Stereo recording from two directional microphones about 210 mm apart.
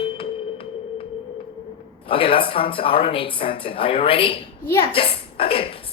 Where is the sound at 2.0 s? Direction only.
25° left (ahead or behind).